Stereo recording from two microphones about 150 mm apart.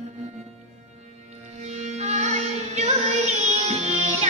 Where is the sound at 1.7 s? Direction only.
45° right (ahead or behind).